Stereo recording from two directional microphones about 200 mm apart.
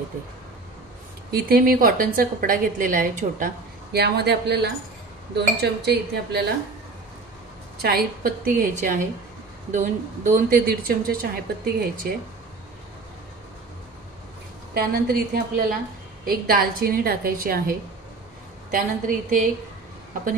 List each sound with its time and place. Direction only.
1.3 s a woman's voice: 45° right (ahead or behind)
7.8 s a woman's voice: 45° right (ahead or behind)
14.7 s a woman's voice: 50° right (ahead or behind)